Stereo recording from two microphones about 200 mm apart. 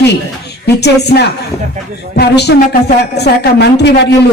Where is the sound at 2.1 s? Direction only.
55° left (ahead or behind).